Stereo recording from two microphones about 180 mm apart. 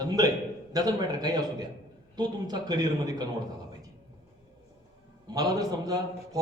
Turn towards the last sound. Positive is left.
turn(degrees=-20)  # may be behind; listen again after turning